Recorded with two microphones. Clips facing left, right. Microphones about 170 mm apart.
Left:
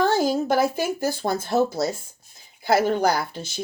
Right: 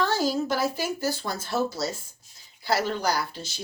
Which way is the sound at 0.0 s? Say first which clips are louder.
Left 4 dB; 50° left (ahead or behind).